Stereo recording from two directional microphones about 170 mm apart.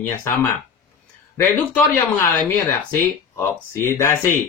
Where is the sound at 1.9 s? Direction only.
15° left (ahead or behind).